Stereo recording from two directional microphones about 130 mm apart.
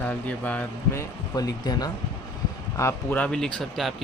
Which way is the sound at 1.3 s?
30° left (ahead or behind).